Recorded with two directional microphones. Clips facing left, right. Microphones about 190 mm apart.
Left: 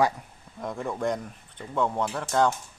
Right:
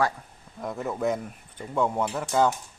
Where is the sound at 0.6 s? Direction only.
5° right (ahead or behind).